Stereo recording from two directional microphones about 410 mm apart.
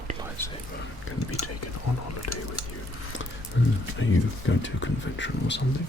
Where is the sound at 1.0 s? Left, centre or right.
Left.